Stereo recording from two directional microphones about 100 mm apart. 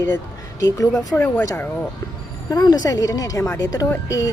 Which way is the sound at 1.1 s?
20° left (ahead or behind).